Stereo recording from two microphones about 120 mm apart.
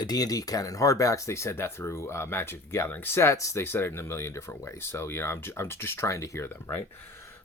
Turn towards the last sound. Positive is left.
turn(degrees=20)  # may be behind; listen again after turning